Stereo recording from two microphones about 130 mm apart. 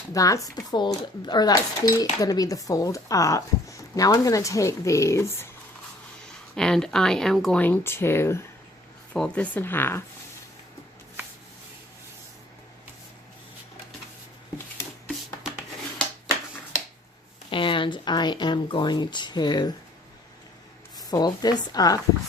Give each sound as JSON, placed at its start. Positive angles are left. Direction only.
{"t": 0.1, "sound": "speech", "side_deg": 25}
{"t": 6.6, "sound": "speech", "side_deg": 5}
{"t": 7.6, "sound": "speech", "side_deg": 15}
{"t": 9.1, "sound": "speech", "side_deg": 5}
{"t": 17.5, "sound": "speech", "side_deg": 40}
{"t": 20.9, "sound": "speech", "side_deg": 30}